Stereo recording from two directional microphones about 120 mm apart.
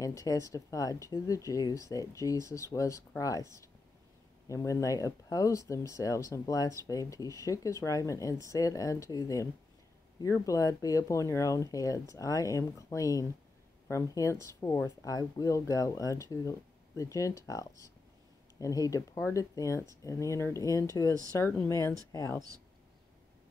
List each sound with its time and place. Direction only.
0.0 s speech: 30° left (ahead or behind)